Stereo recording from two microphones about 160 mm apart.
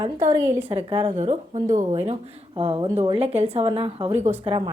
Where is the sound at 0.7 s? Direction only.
40° right (ahead or behind).